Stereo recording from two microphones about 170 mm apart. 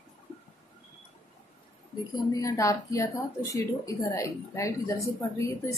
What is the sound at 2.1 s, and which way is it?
Speech, 20° left (ahead or behind).